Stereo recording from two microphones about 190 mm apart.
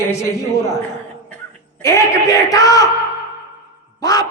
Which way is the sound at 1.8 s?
15° left (ahead or behind).